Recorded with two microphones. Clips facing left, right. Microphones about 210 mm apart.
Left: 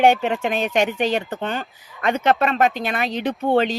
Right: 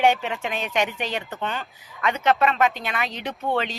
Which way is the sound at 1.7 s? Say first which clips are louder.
Left 1 dB; centre (ahead or behind).